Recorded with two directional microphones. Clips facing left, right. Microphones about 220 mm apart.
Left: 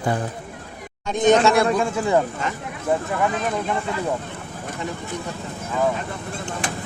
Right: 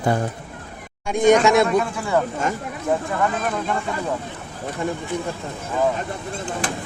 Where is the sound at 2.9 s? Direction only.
5° left (ahead or behind).